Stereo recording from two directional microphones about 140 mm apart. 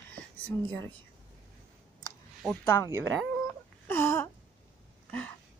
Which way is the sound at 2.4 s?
Centre (ahead or behind).